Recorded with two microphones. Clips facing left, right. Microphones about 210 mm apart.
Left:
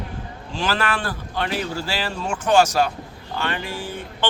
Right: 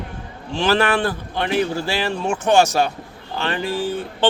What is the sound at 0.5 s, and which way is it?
A man's voice, 25° right (ahead or behind).